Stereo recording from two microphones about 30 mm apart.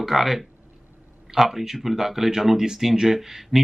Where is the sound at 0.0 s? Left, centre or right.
Centre.